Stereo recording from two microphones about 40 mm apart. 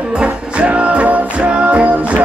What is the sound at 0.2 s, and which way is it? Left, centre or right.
Music, right.